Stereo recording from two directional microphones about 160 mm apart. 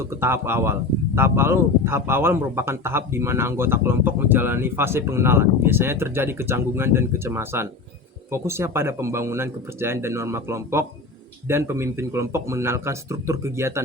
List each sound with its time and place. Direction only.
0.2 s speech: 15° right (ahead or behind)